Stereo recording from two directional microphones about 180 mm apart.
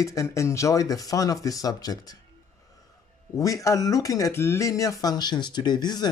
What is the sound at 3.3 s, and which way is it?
Speech, 15° left (ahead or behind).